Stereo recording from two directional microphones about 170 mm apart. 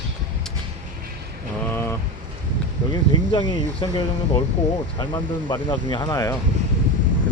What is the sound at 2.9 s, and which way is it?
Speech, 25° left (ahead or behind).